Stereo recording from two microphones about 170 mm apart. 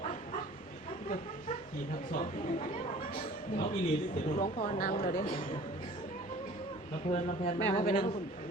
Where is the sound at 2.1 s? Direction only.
55° left (ahead or behind).